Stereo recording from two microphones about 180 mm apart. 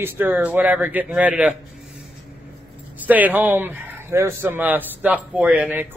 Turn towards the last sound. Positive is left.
turn(degrees=-10)  # may be behind; listen again after turning